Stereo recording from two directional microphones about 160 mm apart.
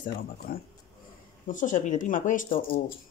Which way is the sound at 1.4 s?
55° left (ahead or behind).